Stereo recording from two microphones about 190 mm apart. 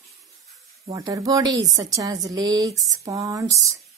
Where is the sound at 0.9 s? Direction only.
20° right (ahead or behind).